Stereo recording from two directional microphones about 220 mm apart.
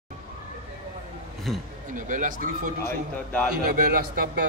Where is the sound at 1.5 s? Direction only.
Centre (ahead or behind).